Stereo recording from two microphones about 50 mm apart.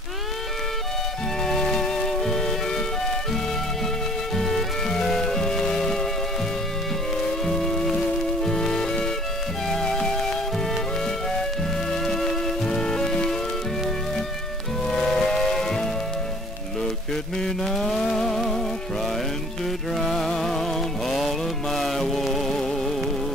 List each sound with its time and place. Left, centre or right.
1.4 s music: centre
4.4 s music: centre
7.4 s music: centre
14.9 s music: centre
16.8 s mantra: centre
19.6 s music: centre